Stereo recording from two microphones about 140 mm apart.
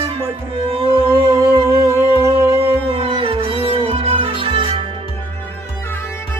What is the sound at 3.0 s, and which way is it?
Music, 40° right (ahead or behind).